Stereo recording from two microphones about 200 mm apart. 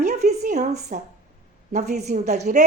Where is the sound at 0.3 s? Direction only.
35° right (ahead or behind).